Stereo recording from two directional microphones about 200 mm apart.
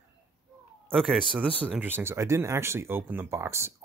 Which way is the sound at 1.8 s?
10° right (ahead or behind).